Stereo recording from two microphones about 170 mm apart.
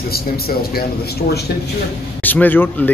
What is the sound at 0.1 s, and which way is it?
A man's voice, 65° left (ahead or behind).